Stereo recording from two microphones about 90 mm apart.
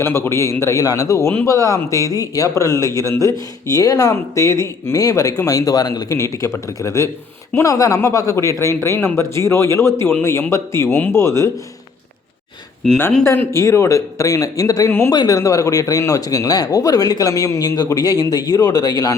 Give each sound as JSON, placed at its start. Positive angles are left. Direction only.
{"t": 0.0, "sound": "speech", "side_deg": 30}
{"t": 12.8, "sound": "speech", "side_deg": 5}
{"t": 13.2, "sound": "speech", "side_deg": 25}
{"t": 14.8, "sound": "speech", "side_deg": 25}
{"t": 15.1, "sound": "speech", "side_deg": 45}